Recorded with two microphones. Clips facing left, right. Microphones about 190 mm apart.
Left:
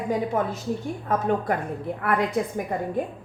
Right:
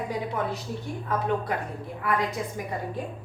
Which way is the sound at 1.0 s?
45° left (ahead or behind).